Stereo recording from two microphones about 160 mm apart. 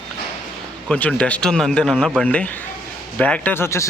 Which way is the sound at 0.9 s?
5° left (ahead or behind).